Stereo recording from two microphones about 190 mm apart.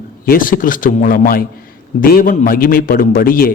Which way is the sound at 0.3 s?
50° left (ahead or behind).